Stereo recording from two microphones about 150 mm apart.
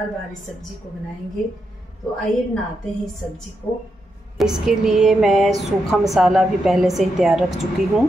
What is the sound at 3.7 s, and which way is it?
Speech, 20° left (ahead or behind).